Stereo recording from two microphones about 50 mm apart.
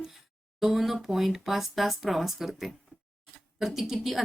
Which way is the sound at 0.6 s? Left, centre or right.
Centre.